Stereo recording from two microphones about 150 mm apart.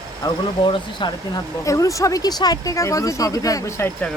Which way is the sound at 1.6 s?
20° left (ahead or behind).